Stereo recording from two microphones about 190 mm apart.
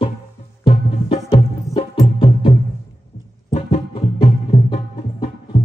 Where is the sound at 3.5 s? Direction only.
30° left (ahead or behind).